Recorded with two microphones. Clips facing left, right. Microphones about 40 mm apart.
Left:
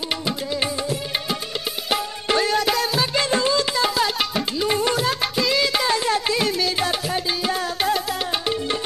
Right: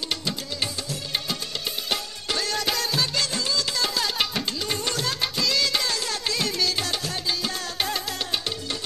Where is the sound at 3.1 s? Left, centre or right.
Left.